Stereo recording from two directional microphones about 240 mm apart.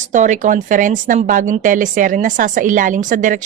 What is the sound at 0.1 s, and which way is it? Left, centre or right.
A woman's voice, right.